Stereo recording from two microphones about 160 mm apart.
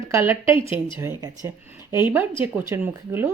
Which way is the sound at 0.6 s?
35° left (ahead or behind).